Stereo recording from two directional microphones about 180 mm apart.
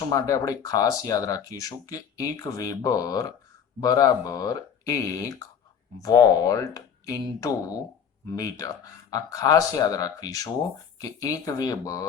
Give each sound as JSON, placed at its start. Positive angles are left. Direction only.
{"t": 0.1, "sound": "speech", "side_deg": 20}